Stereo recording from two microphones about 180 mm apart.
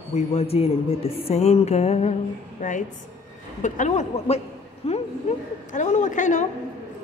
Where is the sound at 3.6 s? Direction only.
45° left (ahead or behind).